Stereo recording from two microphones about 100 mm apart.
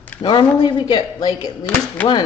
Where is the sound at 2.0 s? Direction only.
15° left (ahead or behind).